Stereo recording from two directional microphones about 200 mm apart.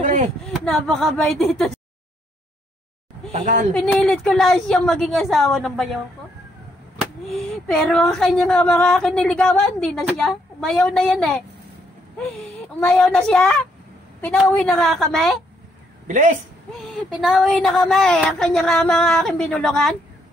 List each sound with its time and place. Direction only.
0.0 s a sound: 35° right (ahead or behind)
0.5 s speech: centre (ahead or behind)
3.3 s a woman's voice: 35° right (ahead or behind)
3.7 s speech: centre (ahead or behind)
7.0 s speech: centre (ahead or behind)
12.8 s speech: 5° left (ahead or behind)
16.1 s speech: 40° right (ahead or behind)
16.7 s speech: centre (ahead or behind)